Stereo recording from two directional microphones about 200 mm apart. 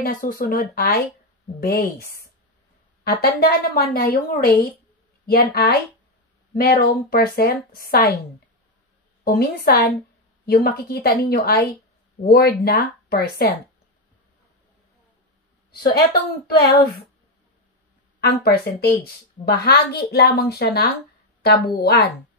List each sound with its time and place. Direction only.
0.0 s a woman's voice: 45° left (ahead or behind)
9.2 s a woman's voice: 50° left (ahead or behind)
15.7 s a woman's voice: 50° left (ahead or behind)
18.2 s a woman's voice: 50° left (ahead or behind)